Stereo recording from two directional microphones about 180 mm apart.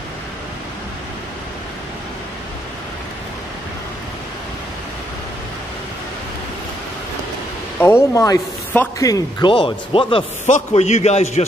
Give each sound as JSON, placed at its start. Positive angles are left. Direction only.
{"t": 7.8, "sound": "a man's voice", "side_deg": 15}